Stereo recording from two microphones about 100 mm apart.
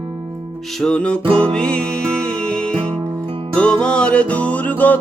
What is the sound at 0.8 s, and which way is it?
Music, 10° left (ahead or behind).